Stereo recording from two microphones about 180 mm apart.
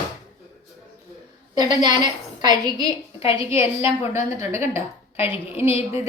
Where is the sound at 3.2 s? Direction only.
30° left (ahead or behind).